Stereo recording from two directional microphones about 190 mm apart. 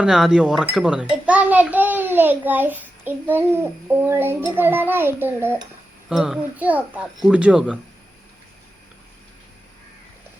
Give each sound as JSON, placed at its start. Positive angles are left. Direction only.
{"t": 0.0, "sound": "a child's voice", "side_deg": -5}